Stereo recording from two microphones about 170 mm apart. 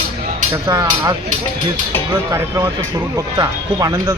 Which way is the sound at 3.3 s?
20° right (ahead or behind).